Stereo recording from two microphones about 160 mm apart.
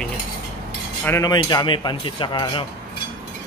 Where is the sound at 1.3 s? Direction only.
30° left (ahead or behind).